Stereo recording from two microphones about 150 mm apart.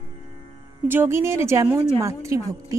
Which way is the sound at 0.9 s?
15° right (ahead or behind).